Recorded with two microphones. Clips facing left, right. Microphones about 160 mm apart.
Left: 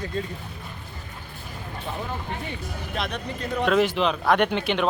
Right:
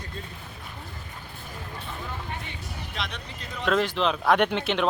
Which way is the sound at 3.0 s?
55° left (ahead or behind).